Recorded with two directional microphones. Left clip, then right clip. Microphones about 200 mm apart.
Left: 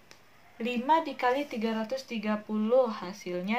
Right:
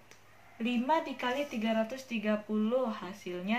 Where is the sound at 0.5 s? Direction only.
45° left (ahead or behind).